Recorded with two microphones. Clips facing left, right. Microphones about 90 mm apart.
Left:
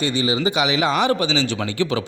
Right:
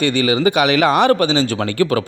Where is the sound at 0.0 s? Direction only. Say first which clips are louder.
Right 5 dB; 60° right (ahead or behind).